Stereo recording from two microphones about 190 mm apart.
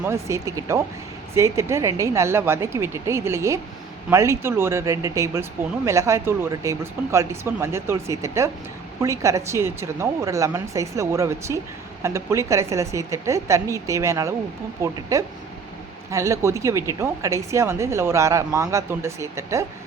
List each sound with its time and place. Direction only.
0.0 s speech: 15° right (ahead or behind)
16.1 s speech: 15° right (ahead or behind)